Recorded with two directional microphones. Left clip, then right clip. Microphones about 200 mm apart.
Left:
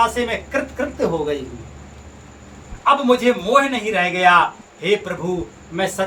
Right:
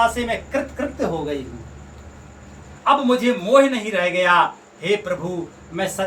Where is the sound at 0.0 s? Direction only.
10° left (ahead or behind).